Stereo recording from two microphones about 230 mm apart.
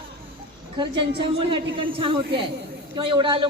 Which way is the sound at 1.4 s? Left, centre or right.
Right.